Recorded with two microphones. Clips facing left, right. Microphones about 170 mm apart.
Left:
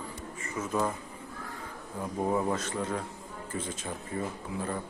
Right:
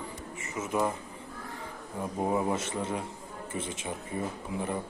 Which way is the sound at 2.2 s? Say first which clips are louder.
Even; 10° right (ahead or behind).